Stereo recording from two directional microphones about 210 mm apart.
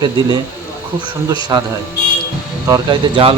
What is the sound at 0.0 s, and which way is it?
Speech, 20° right (ahead or behind).